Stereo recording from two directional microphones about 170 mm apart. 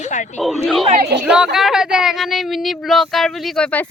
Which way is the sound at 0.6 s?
Centre (ahead or behind).